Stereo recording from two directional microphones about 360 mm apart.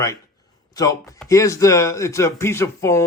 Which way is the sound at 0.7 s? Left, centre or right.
Centre.